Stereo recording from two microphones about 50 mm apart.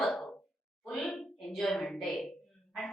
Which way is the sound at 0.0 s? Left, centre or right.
Centre.